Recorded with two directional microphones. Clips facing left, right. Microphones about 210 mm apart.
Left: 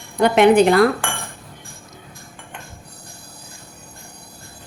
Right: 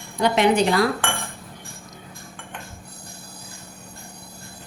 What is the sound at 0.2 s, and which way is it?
Speech, 55° left (ahead or behind).